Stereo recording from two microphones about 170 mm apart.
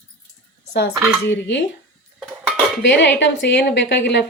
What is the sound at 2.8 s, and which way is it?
A woman's voice, 90° left.